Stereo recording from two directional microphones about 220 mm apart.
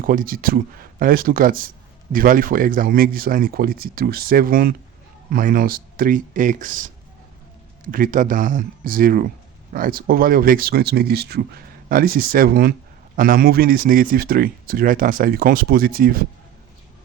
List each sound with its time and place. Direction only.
0.0 s speech: 40° right (ahead or behind)